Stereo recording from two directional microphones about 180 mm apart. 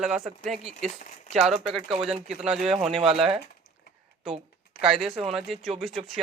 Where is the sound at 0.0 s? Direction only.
Centre (ahead or behind).